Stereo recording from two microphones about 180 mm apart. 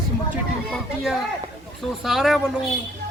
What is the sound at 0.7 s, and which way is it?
Speech, centre (ahead or behind).